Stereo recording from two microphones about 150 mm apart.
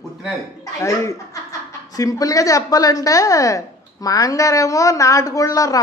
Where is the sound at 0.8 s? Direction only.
20° left (ahead or behind).